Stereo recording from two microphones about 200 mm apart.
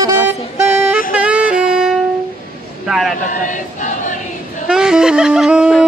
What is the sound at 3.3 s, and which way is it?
Choir, 40° left (ahead or behind).